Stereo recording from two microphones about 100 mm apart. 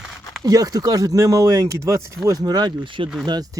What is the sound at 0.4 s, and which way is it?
Speech, 35° right (ahead or behind).